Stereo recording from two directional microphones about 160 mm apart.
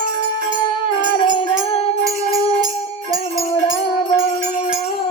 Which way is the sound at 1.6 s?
25° right (ahead or behind).